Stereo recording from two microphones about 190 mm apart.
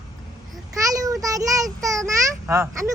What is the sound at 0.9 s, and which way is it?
Child singing, 20° right (ahead or behind).